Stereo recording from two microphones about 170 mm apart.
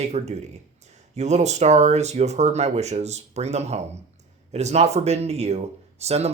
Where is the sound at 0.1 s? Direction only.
40° right (ahead or behind).